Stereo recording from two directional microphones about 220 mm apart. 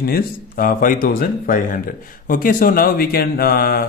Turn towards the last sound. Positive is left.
turn(degrees=45)  # may be behind; listen again after turning